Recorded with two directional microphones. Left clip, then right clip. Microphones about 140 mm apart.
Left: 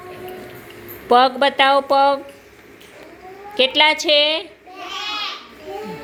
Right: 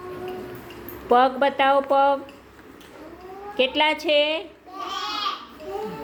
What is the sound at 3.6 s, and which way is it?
Speech, 5° left (ahead or behind).